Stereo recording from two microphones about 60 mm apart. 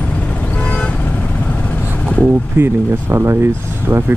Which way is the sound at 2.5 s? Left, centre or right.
Right.